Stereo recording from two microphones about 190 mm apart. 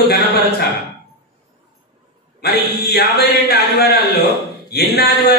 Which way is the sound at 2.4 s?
60° left (ahead or behind).